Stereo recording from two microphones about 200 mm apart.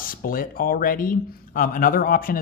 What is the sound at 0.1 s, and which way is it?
Speech, 45° left (ahead or behind).